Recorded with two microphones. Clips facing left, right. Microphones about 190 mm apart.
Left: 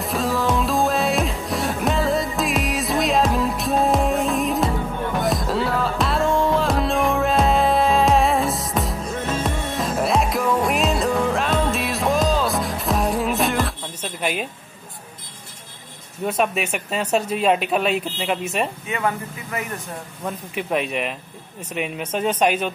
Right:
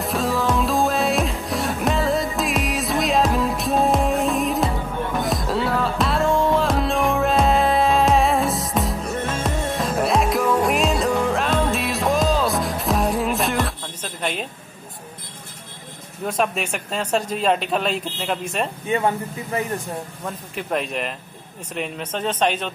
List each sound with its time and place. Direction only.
0.0 s music: centre (ahead or behind)
16.3 s speech: 5° left (ahead or behind)
18.9 s speech: 30° right (ahead or behind)
20.2 s speech: 5° left (ahead or behind)